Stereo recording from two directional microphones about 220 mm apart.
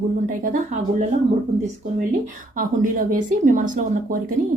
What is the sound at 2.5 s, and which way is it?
Speech, 40° right (ahead or behind).